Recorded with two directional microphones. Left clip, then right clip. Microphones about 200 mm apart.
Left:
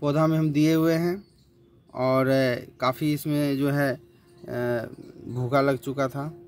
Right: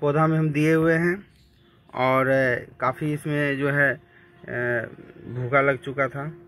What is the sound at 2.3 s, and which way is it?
Speech, 20° left (ahead or behind).